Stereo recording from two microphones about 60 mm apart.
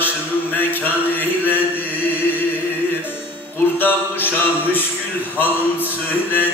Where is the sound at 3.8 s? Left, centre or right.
Left.